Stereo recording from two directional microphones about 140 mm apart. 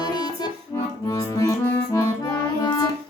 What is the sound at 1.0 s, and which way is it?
Music, 25° left (ahead or behind).